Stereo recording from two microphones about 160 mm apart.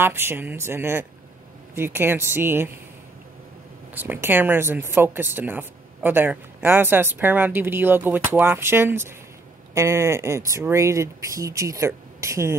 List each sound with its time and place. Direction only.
0.0 s speech: 15° right (ahead or behind)
3.9 s speech: 10° right (ahead or behind)